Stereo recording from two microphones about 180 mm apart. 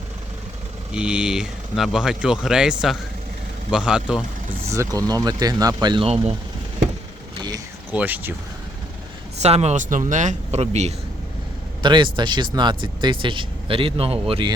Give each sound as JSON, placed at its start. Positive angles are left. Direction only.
{"t": 0.9, "sound": "speech", "side_deg": -5}
{"t": 4.7, "sound": "speech", "side_deg": -20}
{"t": 7.9, "sound": "speech", "side_deg": -10}
{"t": 9.4, "sound": "speech", "side_deg": -35}
{"t": 11.8, "sound": "speech", "side_deg": -25}